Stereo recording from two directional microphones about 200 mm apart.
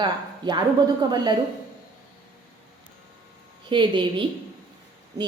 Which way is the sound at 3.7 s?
25° right (ahead or behind).